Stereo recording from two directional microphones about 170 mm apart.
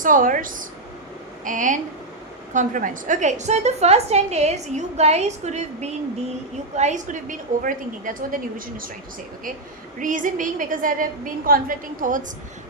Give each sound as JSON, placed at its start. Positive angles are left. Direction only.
{"t": 0.0, "sound": "a woman's voice", "side_deg": -50}
{"t": 10.0, "sound": "a woman's voice", "side_deg": -50}